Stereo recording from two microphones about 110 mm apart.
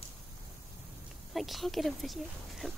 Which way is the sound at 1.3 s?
Centre (ahead or behind).